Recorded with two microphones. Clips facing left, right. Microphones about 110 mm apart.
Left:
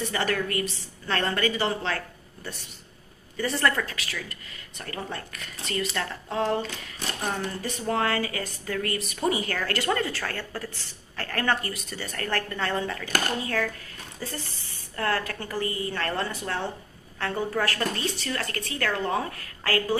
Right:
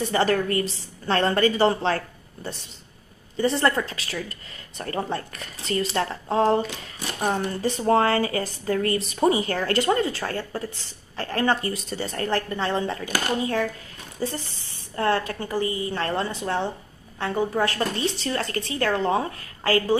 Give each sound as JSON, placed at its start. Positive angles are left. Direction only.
{"t": 0.0, "sound": "speech", "side_deg": -35}